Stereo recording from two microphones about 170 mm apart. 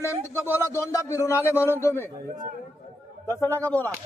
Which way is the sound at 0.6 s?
15° left (ahead or behind).